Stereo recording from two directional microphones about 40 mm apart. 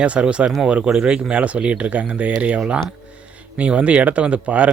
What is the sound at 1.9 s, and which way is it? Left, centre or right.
Speech, right.